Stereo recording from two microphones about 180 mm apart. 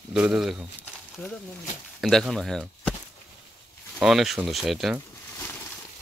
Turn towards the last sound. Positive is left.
turn(degrees=0)  # may be behind; listen again after turning